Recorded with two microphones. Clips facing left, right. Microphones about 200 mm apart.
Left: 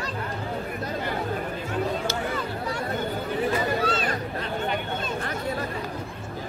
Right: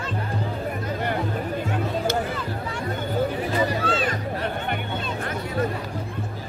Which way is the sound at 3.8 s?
40° left (ahead or behind).